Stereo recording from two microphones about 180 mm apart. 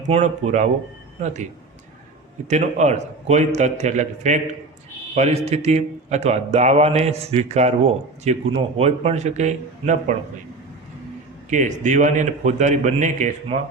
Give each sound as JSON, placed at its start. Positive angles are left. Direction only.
{"t": 0.1, "sound": "a man's voice", "side_deg": -40}
{"t": 2.5, "sound": "a man's voice", "side_deg": -40}
{"t": 11.5, "sound": "a man's voice", "side_deg": -45}